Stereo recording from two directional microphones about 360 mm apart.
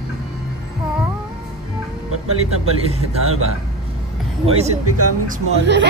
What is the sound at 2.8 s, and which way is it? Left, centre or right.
Speech, centre.